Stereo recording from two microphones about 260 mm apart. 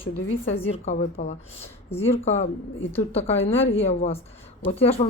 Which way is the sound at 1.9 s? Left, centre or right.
Centre.